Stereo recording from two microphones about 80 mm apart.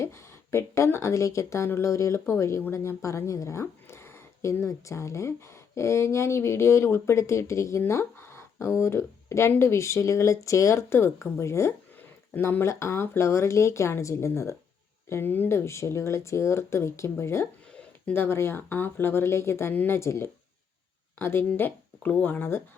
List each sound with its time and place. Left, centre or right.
0.0 s speech: left
12.3 s speech: left
15.1 s speech: left
17.7 s speech: left